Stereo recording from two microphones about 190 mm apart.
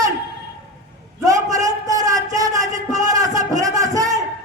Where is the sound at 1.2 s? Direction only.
20° right (ahead or behind).